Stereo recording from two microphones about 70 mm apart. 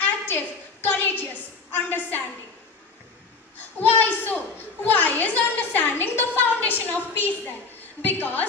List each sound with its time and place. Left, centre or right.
0.0 s a sound: left
0.9 s a woman's voice: left
3.8 s a woman's voice: left